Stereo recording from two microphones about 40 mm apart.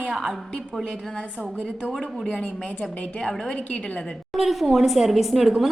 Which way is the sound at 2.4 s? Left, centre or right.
Centre.